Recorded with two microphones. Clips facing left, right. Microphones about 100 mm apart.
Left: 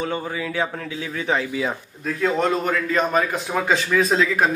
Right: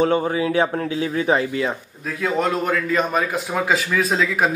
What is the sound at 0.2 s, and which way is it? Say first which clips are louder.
Speech: right 7 dB; 30° right (ahead or behind).